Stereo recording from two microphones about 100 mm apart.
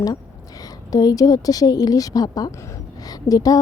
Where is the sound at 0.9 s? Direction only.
35° left (ahead or behind).